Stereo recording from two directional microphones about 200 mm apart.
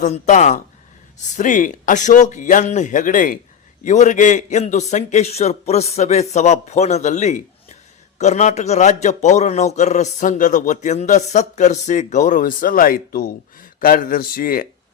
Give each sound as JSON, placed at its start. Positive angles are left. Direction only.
{"t": 0.0, "sound": "a man's voice", "side_deg": 40}